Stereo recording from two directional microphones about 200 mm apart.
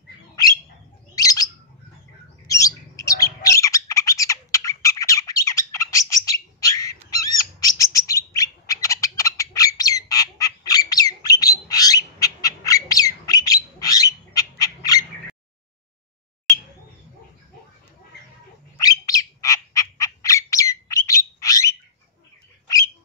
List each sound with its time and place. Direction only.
1.1 s bird: 20° left (ahead or behind)
18.8 s squawk: 15° left (ahead or behind)